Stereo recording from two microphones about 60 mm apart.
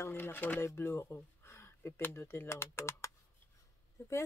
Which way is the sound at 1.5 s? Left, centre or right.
Left.